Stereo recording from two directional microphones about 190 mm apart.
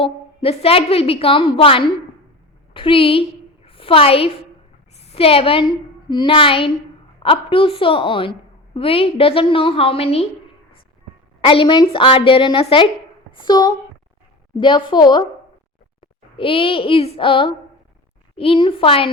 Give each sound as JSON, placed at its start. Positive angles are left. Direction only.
{"t": 0.0, "sound": "a woman's voice", "side_deg": 30}
{"t": 11.3, "sound": "a woman's voice", "side_deg": 30}